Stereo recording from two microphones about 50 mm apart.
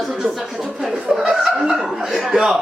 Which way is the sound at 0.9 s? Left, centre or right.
Centre.